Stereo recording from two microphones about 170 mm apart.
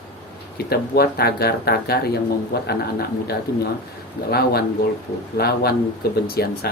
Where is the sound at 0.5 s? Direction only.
65° left (ahead or behind).